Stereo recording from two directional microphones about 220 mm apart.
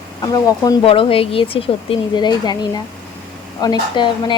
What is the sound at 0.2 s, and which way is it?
A woman's voice, 15° left (ahead or behind).